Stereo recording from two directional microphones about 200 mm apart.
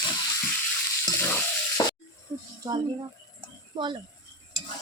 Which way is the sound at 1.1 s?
10° left (ahead or behind).